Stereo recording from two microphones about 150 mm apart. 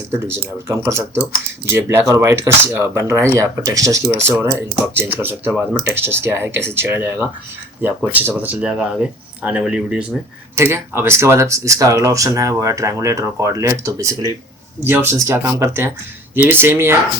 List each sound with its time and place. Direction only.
0.1 s speech: 15° right (ahead or behind)
10.6 s speech: 15° right (ahead or behind)